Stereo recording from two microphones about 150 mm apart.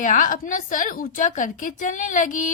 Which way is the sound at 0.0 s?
60° left (ahead or behind).